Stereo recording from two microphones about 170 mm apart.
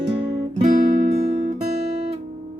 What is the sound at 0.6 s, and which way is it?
Music, 50° right (ahead or behind).